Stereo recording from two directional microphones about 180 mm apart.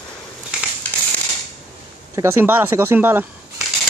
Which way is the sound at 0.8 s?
10° left (ahead or behind).